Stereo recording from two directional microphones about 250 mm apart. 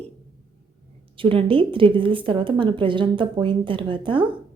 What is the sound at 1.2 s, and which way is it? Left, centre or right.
A woman's voice, right.